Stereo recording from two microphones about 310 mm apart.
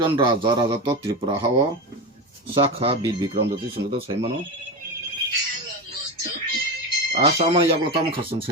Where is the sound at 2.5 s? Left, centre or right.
Centre.